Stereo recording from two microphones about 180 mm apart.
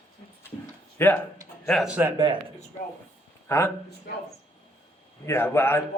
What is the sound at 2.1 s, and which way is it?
Speech, 25° right (ahead or behind).